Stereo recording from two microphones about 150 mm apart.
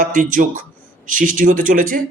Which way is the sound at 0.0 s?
60° right (ahead or behind).